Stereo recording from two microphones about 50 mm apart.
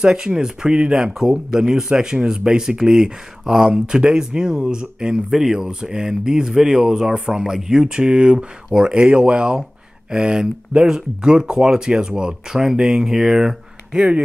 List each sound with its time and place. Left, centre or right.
0.0 s speech: centre